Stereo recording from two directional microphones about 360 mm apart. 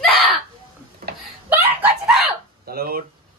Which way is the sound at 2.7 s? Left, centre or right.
Right.